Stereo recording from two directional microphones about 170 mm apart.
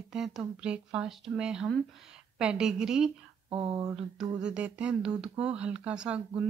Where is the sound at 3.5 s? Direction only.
30° right (ahead or behind).